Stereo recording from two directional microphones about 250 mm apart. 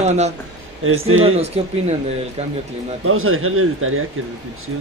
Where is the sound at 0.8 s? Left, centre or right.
Right.